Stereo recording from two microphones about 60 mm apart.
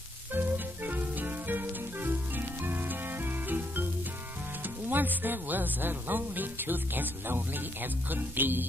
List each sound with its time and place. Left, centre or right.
0.3 s music: right
4.8 s speech: right